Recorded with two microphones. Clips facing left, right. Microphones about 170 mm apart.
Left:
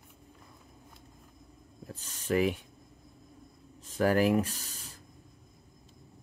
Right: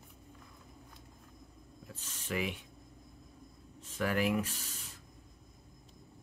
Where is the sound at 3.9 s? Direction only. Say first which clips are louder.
Left 6 dB; 40° left (ahead or behind).